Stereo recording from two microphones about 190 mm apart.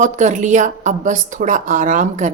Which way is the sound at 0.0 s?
40° right (ahead or behind).